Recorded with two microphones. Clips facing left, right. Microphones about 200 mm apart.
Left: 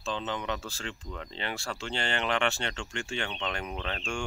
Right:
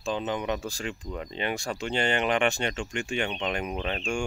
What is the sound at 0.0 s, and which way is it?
Speech, 15° right (ahead or behind).